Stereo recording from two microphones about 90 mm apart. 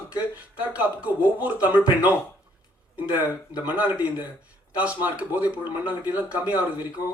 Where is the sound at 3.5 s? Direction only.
15° right (ahead or behind).